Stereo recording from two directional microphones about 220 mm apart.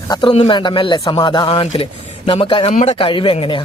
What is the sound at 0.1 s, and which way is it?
Speech, 20° left (ahead or behind).